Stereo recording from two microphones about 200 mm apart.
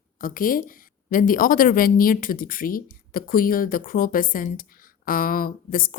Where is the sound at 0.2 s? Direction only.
45° left (ahead or behind).